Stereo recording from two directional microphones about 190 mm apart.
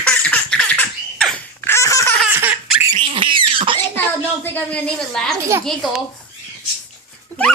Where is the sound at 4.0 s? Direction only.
10° left (ahead or behind).